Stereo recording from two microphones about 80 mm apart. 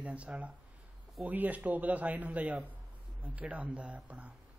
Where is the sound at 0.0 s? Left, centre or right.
Centre.